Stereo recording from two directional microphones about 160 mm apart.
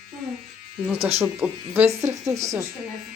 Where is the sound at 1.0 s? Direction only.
40° right (ahead or behind).